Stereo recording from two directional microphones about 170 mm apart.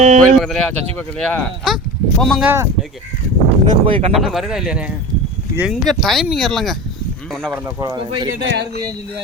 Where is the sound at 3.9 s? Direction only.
30° right (ahead or behind).